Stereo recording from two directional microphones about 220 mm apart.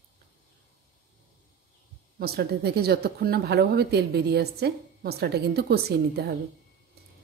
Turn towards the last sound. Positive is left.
turn(degrees=-45)  # may be behind; listen again after turning